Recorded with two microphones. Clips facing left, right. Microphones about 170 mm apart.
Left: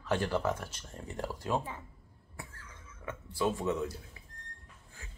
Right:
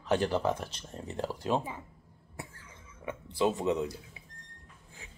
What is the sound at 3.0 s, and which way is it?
Speech, 20° right (ahead or behind).